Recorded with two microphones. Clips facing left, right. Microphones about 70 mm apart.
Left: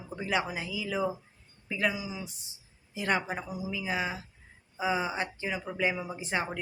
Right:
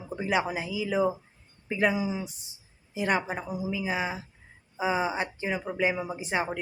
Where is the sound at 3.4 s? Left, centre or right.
Right.